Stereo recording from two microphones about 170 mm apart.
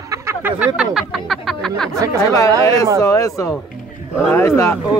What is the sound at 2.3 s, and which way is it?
Speech, 20° left (ahead or behind).